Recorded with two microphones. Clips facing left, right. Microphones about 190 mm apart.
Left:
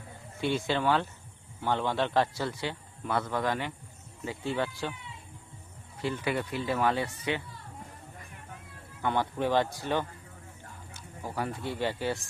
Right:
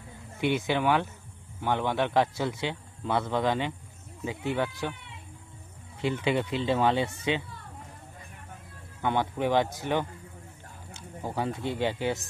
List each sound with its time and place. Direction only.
0.3 s a man's voice: 15° right (ahead or behind)
6.0 s a man's voice: 20° right (ahead or behind)
9.0 s speech: 15° right (ahead or behind)